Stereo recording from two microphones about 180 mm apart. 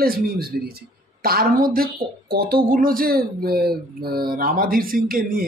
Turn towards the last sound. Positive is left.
turn(degrees=-55)  # may be behind; listen again after turning